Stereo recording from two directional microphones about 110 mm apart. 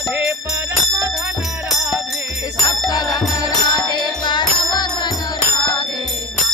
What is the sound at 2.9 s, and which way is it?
Music, 35° left (ahead or behind).